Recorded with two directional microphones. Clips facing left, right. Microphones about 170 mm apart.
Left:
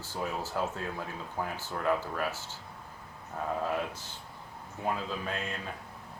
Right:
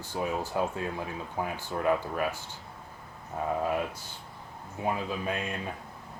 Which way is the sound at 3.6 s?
10° right (ahead or behind).